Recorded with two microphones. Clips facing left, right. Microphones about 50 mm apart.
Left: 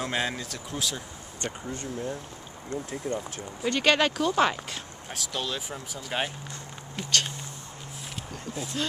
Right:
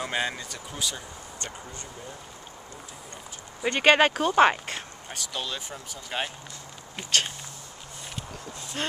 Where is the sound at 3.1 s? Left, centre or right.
Left.